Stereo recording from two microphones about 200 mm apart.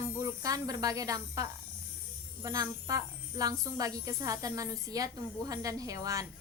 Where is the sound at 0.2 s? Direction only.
15° right (ahead or behind).